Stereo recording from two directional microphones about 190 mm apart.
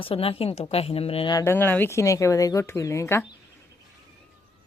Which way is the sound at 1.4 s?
10° left (ahead or behind).